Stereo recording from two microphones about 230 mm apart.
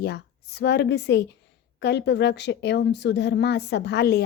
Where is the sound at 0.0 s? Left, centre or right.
Left.